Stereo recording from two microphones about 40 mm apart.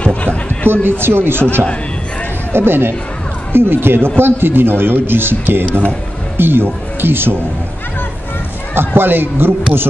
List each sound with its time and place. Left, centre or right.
0.0 s chatter: left
0.7 s a man's voice: right
2.5 s a man's voice: right
8.7 s speech: right